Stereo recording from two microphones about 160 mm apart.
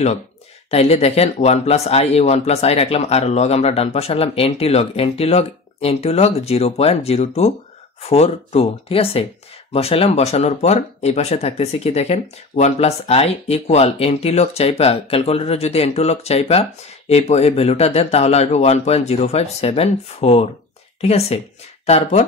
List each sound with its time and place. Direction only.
0.7 s speech: 40° left (ahead or behind)